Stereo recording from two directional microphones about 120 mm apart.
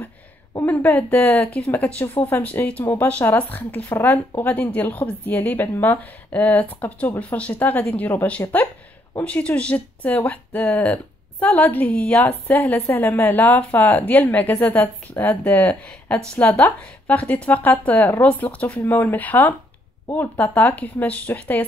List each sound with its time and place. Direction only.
0.6 s speech: 15° left (ahead or behind)